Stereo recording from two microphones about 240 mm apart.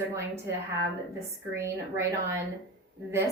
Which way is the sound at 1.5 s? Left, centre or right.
Centre.